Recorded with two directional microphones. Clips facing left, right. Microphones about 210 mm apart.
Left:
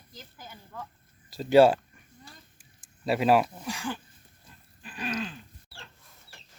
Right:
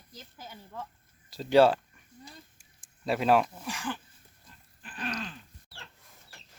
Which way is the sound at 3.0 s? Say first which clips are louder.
Left 2 dB; 5° left (ahead or behind).